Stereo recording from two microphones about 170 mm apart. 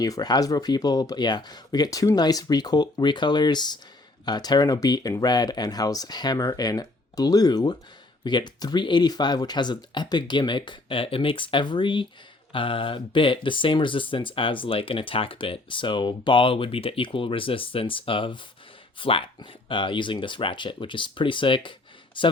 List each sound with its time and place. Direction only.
0.0 s speech: 25° left (ahead or behind)